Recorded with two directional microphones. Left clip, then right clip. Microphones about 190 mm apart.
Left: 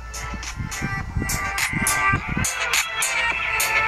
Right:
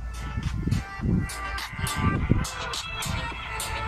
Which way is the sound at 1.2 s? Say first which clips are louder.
Left 9 dB; 30° left (ahead or behind).